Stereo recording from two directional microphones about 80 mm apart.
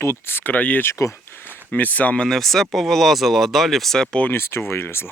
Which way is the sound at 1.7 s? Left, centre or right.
Centre.